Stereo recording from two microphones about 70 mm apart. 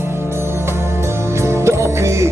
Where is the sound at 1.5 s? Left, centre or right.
Right.